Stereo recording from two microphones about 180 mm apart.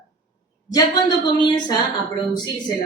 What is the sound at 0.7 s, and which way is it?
Speech, 25° left (ahead or behind).